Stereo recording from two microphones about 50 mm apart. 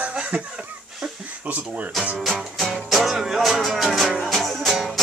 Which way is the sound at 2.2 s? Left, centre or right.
Centre.